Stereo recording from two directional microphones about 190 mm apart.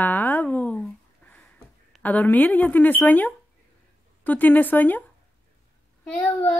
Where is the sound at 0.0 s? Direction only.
10° left (ahead or behind).